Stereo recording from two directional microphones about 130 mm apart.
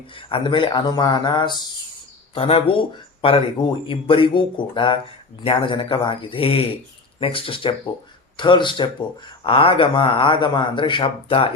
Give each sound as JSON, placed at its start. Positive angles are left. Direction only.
{"t": 0.3, "sound": "speech", "side_deg": 40}